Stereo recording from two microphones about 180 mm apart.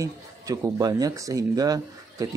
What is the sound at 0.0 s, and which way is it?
Speech, 20° right (ahead or behind).